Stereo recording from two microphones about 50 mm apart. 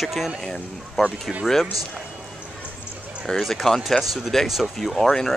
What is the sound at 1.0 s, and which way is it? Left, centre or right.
Speech, centre.